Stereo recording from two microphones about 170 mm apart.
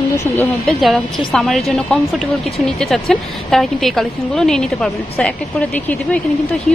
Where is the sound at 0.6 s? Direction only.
Centre (ahead or behind).